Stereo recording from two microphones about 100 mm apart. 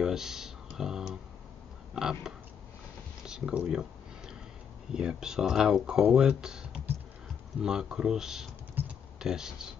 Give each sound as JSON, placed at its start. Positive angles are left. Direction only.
{"t": 0.0, "sound": "a sound", "side_deg": -5}
{"t": 2.0, "sound": "speech", "side_deg": -5}
{"t": 4.9, "sound": "speech", "side_deg": -5}